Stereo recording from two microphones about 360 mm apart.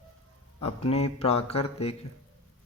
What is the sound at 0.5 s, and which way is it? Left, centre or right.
Speech, left.